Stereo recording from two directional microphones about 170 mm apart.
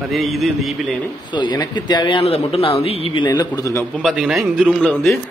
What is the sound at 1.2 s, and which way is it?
Speech, 25° left (ahead or behind).